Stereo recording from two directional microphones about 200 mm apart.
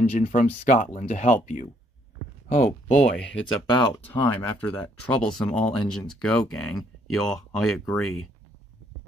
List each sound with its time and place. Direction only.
0.1 s speech: 35° left (ahead or behind)
3.6 s speech: 25° left (ahead or behind)
4.1 s speech: 10° left (ahead or behind)